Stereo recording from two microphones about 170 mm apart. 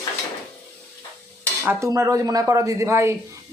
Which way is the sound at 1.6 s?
15° right (ahead or behind).